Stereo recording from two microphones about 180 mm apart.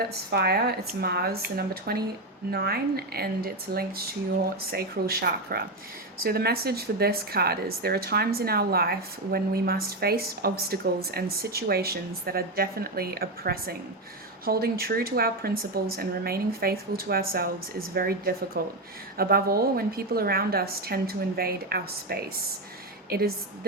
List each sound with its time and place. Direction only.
0.3 s a woman's voice: 60° right (ahead or behind)